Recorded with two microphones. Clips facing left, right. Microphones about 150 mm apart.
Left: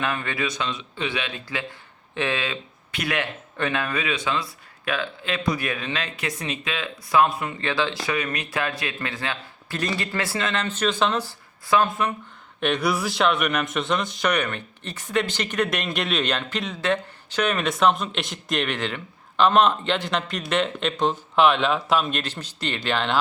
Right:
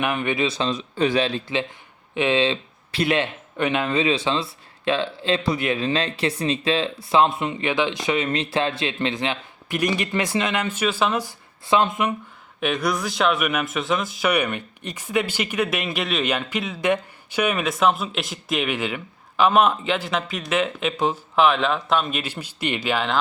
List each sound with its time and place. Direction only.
0.0 s speech: 20° right (ahead or behind); by 1.4 s 35° right (ahead or behind)
2.1 s speech: 20° right (ahead or behind)
11.6 s speech: 25° right (ahead or behind)
12.5 s speech: centre (ahead or behind)
22.2 s speech: 10° right (ahead or behind)